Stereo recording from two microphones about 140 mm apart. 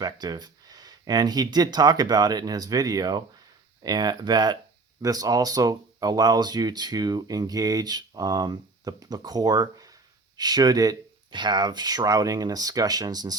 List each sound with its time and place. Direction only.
0.0 s speech: 30° right (ahead or behind)